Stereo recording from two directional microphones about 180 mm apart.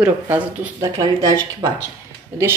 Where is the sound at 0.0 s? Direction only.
5° right (ahead or behind).